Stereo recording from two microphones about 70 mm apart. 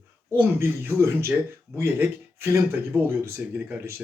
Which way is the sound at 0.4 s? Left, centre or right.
Right.